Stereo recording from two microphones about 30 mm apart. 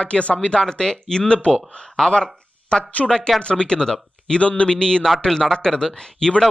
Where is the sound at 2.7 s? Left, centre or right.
Left.